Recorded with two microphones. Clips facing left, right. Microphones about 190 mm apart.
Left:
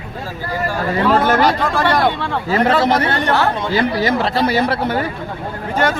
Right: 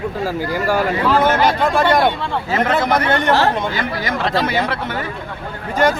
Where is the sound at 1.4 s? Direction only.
20° right (ahead or behind).